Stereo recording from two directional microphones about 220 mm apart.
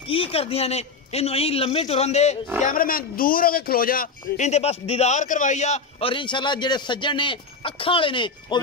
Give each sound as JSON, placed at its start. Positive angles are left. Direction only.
{"t": 0.0, "sound": "a man's voice", "side_deg": 25}